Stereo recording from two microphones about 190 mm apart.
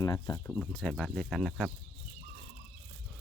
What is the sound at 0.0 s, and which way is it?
Speech, 20° left (ahead or behind).